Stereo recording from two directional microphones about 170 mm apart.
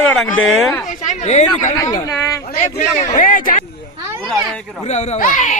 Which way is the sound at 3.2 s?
50° left (ahead or behind).